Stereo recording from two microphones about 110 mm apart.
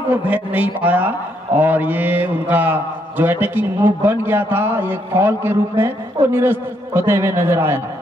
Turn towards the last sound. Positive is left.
turn(degrees=-20)  # may be behind; listen again after turning